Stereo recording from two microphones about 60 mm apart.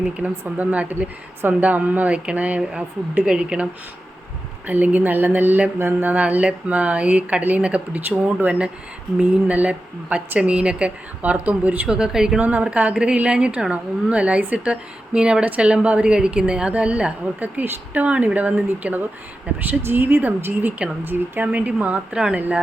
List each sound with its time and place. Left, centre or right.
0.2 s a woman's voice: right
4.6 s a woman's voice: right
11.9 s a woman's voice: centre
12.4 s a woman's voice: right
19.6 s a woman's voice: right; by 22.4 s centre